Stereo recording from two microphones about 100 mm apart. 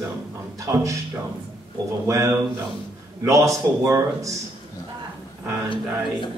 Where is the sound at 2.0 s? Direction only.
30° right (ahead or behind).